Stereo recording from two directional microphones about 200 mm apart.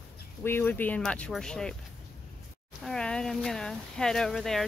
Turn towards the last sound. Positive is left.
turn(degrees=0)  # may be behind; listen again after turning